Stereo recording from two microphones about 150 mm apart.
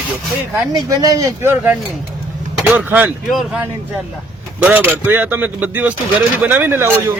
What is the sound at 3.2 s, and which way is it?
Speech, centre (ahead or behind).